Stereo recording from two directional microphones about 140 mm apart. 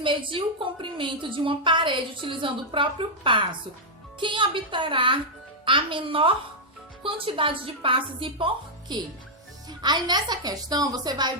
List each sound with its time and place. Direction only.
0.0 s a woman's voice: 35° right (ahead or behind)